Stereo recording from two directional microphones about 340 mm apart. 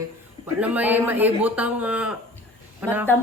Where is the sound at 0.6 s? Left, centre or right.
Centre.